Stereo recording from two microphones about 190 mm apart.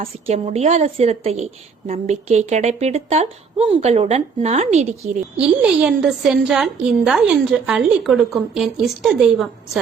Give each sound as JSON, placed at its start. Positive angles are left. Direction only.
{"t": 0.0, "sound": "a woman's voice", "side_deg": -30}
{"t": 5.4, "sound": "a woman's voice", "side_deg": -5}